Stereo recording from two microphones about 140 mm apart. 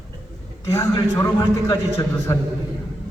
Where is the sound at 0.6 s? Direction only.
20° left (ahead or behind).